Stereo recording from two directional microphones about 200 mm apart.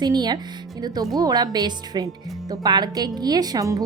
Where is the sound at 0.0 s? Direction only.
20° right (ahead or behind).